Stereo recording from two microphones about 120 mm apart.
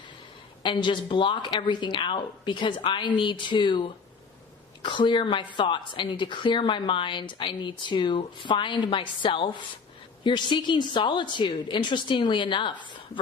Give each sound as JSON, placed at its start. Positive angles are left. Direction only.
{"t": 0.6, "sound": "a woman's voice", "side_deg": 40}